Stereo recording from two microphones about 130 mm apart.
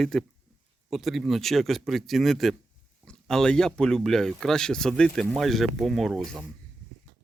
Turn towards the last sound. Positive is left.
turn(degrees=0)  # may be behind; listen again after turning